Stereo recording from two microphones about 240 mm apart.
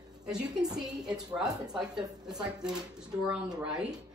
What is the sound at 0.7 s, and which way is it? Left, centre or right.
Speech, centre.